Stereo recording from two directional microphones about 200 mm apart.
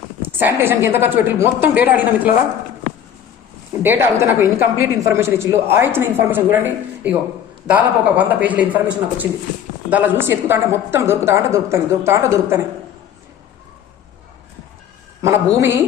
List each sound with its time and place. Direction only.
0.2 s a man's voice: 10° right (ahead or behind)
3.7 s a man's voice: 10° right (ahead or behind)
7.7 s a man's voice: 10° right (ahead or behind)
15.2 s a man's voice: 15° right (ahead or behind)